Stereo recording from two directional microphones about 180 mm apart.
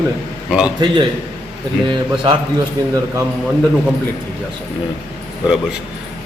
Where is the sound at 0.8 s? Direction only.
25° right (ahead or behind).